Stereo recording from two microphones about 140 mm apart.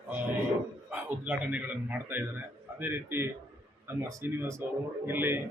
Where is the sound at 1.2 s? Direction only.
10° right (ahead or behind).